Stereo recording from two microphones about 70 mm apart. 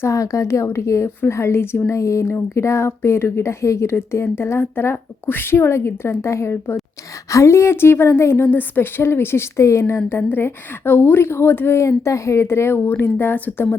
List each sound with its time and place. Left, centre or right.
0.0 s a woman's voice: left